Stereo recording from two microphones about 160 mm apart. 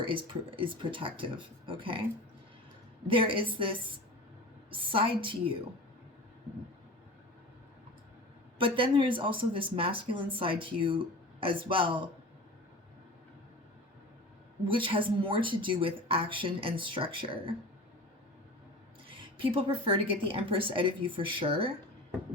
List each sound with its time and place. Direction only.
0.1 s a woman's voice: 30° right (ahead or behind)
3.1 s a woman's voice: 35° right (ahead or behind)
8.5 s a woman's voice: 30° right (ahead or behind)
14.6 s a woman's voice: 30° right (ahead or behind)
19.0 s a woman's voice: 35° right (ahead or behind)